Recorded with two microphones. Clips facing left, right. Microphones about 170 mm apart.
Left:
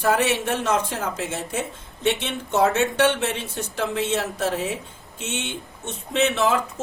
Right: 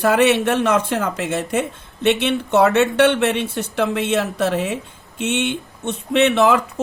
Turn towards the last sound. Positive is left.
turn(degrees=-60)  # may be behind; listen again after turning